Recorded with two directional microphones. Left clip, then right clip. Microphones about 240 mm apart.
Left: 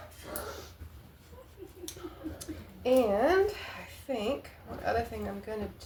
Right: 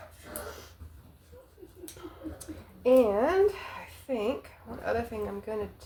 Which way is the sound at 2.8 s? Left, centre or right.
Right.